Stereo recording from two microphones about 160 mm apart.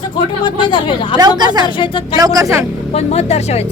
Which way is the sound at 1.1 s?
25° right (ahead or behind).